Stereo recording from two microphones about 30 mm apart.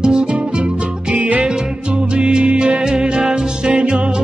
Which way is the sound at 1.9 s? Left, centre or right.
Right.